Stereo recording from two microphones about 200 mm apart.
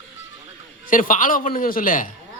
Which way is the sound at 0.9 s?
45° left (ahead or behind).